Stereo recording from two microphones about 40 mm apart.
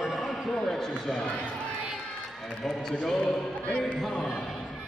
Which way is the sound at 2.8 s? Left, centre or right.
Centre.